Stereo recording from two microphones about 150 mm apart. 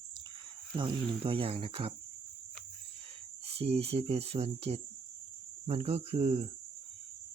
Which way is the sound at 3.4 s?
40° right (ahead or behind).